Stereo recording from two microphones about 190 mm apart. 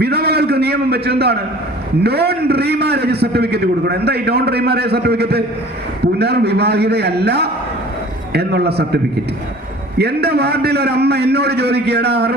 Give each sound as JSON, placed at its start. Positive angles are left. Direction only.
{"t": 0.0, "sound": "a sound", "side_deg": -55}
{"t": 2.0, "sound": "a man's voice", "side_deg": -55}
{"t": 10.0, "sound": "a man's voice", "side_deg": -60}